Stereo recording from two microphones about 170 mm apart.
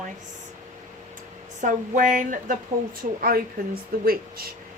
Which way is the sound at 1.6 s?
50° right (ahead or behind).